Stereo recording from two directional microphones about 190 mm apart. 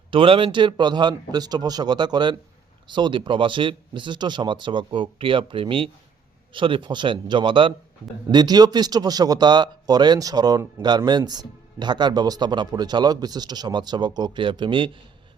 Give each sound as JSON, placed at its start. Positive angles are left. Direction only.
{"t": 0.1, "sound": "speech", "side_deg": -25}